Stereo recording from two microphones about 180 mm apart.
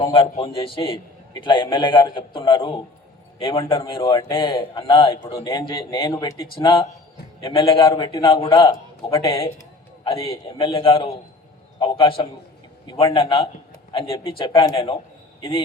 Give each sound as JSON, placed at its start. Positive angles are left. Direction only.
{"t": 0.0, "sound": "a man's voice", "side_deg": 30}